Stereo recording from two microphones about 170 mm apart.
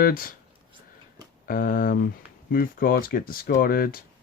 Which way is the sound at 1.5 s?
55° left (ahead or behind).